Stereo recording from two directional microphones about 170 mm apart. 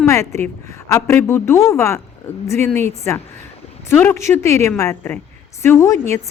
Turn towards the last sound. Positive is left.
turn(degrees=15)  # may be behind; listen again after turning